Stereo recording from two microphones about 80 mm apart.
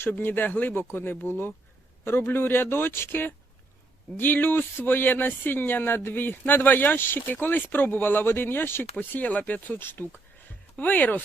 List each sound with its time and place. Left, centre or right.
0.0 s speech: left